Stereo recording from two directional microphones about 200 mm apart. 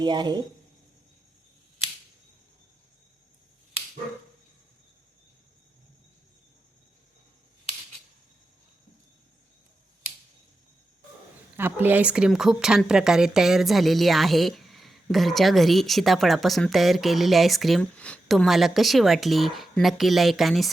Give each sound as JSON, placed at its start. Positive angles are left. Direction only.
{"t": 0.0, "sound": "speech", "side_deg": -20}
{"t": 11.5, "sound": "speech", "side_deg": -10}